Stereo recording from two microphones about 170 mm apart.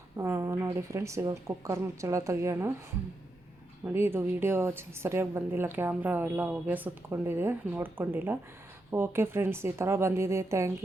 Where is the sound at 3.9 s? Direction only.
15° right (ahead or behind).